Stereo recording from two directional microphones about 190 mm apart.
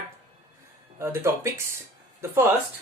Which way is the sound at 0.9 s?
15° right (ahead or behind).